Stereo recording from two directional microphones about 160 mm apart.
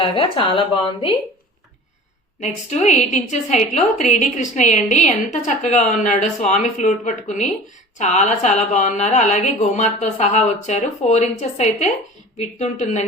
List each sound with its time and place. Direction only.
0.0 s a woman's voice: 35° left (ahead or behind)
2.4 s a woman's voice: 45° left (ahead or behind)